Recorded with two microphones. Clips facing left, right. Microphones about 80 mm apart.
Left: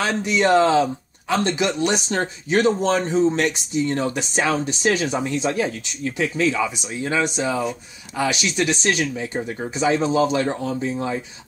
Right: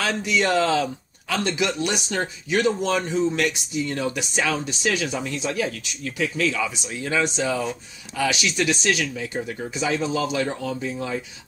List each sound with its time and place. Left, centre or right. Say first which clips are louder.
0.0 s speech: left 3 dB; left